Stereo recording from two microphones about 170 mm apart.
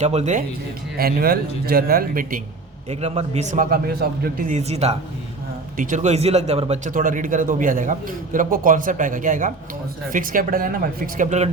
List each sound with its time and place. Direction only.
0.0 s speech: 40° right (ahead or behind)
0.9 s a man's voice: 60° right (ahead or behind)
2.9 s speech: 40° right (ahead or behind); by 4.5 s 60° right (ahead or behind)
4.5 s speech: 40° right (ahead or behind)
5.7 s speech: 50° right (ahead or behind)